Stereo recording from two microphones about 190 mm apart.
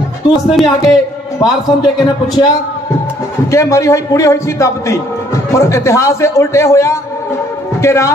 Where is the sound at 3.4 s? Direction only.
15° left (ahead or behind).